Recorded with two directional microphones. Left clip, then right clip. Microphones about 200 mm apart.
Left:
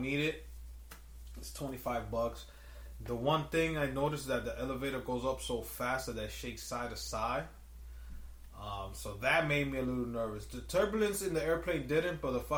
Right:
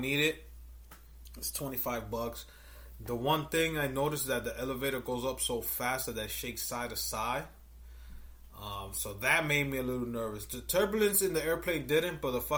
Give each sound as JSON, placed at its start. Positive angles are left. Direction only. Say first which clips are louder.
{"t": 0.0, "sound": "speech", "louder": "right 5 dB", "side_deg": -45}
{"t": 1.5, "sound": "speech", "louder": "even", "side_deg": -45}
{"t": 9.2, "sound": "speech", "louder": "right 2 dB", "side_deg": -50}